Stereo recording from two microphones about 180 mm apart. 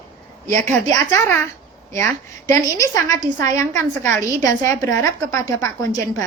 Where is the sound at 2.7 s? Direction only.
20° left (ahead or behind).